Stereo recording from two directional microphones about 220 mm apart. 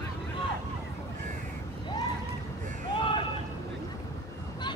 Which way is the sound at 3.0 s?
20° left (ahead or behind).